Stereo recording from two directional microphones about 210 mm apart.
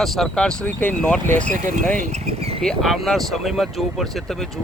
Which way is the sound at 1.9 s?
30° right (ahead or behind).